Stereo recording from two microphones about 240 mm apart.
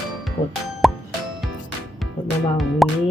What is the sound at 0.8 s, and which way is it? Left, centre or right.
Plop, centre.